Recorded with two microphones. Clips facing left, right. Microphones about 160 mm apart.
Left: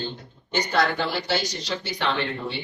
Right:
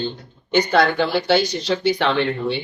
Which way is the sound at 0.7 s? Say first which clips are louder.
Right 4 dB; 65° right (ahead or behind).